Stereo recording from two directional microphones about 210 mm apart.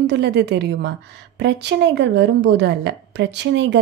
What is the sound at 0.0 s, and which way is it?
A woman's voice, 55° right (ahead or behind).